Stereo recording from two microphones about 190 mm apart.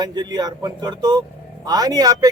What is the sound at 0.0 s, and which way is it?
A man's voice, 20° right (ahead or behind).